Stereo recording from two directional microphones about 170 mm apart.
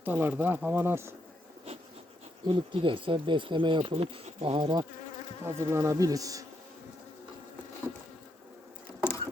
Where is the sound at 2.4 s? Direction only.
30° right (ahead or behind).